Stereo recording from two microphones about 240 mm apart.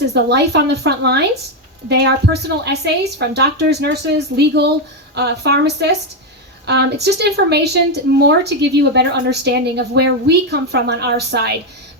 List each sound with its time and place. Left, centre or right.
0.1 s a woman's voice: right